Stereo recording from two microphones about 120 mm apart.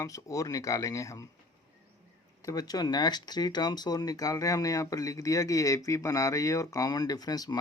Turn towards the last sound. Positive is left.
turn(degrees=30)  # may be behind; listen again after turning